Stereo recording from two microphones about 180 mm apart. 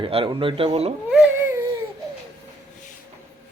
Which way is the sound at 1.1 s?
5° right (ahead or behind).